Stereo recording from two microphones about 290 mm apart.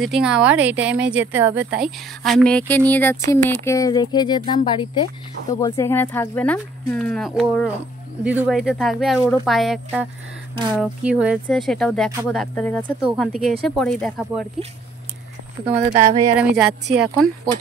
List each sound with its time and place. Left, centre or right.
0.0 s speech: centre
15.7 s speech: right
16.3 s speech: centre